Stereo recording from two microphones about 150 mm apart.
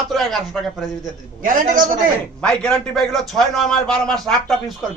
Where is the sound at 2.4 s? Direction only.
5° left (ahead or behind).